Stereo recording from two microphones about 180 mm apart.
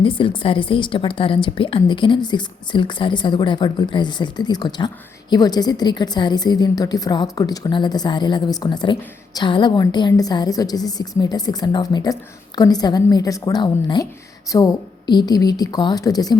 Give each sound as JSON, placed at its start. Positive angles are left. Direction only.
{"t": 0.0, "sound": "a woman's voice", "side_deg": 30}